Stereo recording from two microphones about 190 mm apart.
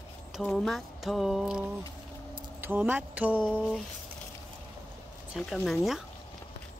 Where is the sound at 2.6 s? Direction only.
10° right (ahead or behind).